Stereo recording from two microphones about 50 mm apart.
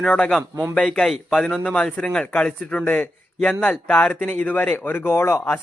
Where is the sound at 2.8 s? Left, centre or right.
Left.